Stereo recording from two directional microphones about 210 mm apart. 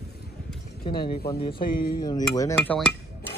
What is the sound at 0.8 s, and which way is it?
Speech, 25° left (ahead or behind).